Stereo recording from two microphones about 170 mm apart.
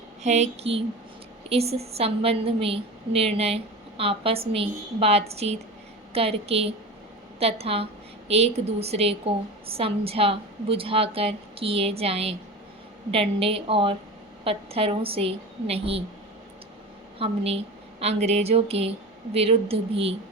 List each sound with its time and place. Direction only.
0.2 s a woman's voice: 40° right (ahead or behind)
17.2 s a woman's voice: 35° right (ahead or behind)